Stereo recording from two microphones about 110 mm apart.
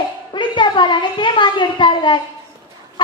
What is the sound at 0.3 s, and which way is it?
A child's voice, 45° left (ahead or behind).